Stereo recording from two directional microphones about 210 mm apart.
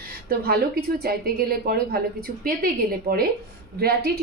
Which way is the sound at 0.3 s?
45° right (ahead or behind).